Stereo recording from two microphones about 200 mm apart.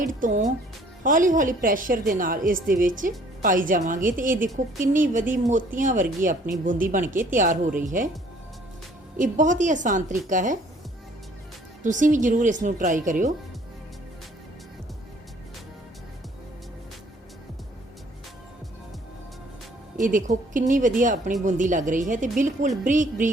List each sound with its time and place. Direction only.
0.0 s a woman's voice: 40° right (ahead or behind)
9.1 s a woman's voice: 40° right (ahead or behind)
11.8 s a woman's voice: 40° right (ahead or behind)
20.0 s a woman's voice: 40° right (ahead or behind)